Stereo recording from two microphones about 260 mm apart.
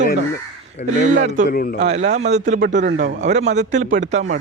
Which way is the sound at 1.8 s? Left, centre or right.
Right.